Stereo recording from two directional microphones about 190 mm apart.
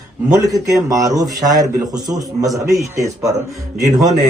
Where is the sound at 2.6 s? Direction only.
15° right (ahead or behind).